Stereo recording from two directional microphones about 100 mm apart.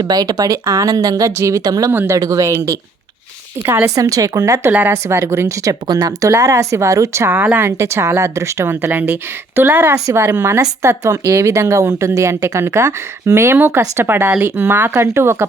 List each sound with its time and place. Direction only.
0.0 s speech: 40° right (ahead or behind)
1.9 s a woman's voice: 20° right (ahead or behind)
2.1 s a woman's voice: 35° right (ahead or behind)
3.9 s a woman's voice: 35° right (ahead or behind); by 7.7 s 15° right (ahead or behind)
7.8 s a woman's voice: 25° right (ahead or behind)